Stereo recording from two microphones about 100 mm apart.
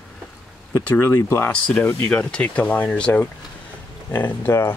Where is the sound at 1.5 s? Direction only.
10° left (ahead or behind).